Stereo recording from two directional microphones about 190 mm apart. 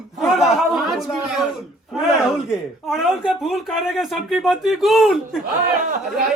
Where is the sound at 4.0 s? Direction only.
Centre (ahead or behind).